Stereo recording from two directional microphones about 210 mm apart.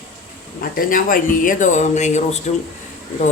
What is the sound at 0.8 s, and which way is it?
Speech, 40° left (ahead or behind).